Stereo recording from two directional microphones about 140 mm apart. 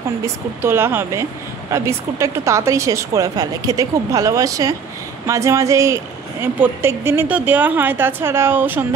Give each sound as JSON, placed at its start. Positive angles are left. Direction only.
{"t": 0.2, "sound": "a woman's voice", "side_deg": -15}